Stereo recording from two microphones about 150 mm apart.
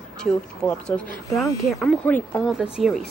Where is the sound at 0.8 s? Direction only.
10° left (ahead or behind).